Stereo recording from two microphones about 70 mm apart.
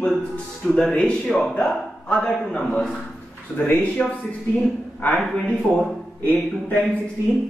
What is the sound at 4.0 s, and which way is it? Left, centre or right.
Speech, centre.